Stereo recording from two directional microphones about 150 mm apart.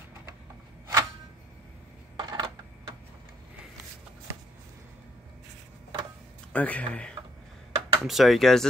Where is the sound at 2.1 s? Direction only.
30° right (ahead or behind).